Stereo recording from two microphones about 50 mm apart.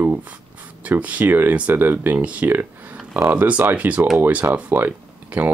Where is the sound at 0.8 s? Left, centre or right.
Right.